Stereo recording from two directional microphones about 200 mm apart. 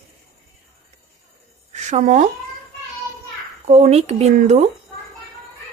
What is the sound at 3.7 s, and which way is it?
A woman's voice, 35° right (ahead or behind).